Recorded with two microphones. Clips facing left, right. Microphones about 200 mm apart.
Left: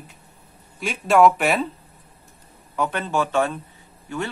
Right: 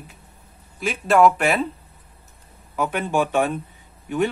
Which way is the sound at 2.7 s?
10° right (ahead or behind).